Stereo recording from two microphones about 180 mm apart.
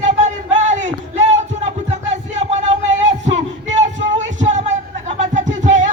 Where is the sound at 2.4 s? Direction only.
35° right (ahead or behind).